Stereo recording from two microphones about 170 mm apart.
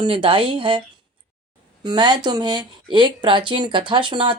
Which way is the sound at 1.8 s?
25° right (ahead or behind).